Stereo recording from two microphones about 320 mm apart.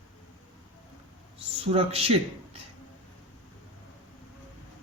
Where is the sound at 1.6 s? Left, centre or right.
Centre.